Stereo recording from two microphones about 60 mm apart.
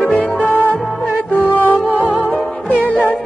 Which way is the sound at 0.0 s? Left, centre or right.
Left.